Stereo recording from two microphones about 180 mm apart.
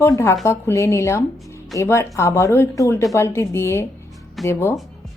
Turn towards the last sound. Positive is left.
turn(degrees=15)  # may be behind; listen again after turning